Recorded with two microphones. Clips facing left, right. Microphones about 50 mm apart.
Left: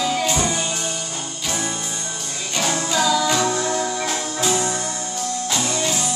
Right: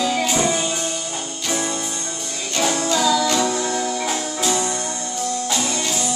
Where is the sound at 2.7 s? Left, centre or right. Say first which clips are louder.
Right 1 dB; centre.